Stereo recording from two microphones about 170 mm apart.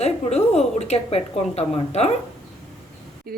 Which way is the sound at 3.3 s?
60° right (ahead or behind).